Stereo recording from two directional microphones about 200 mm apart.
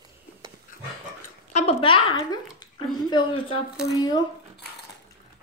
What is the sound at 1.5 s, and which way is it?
A woman's voice, 30° left (ahead or behind).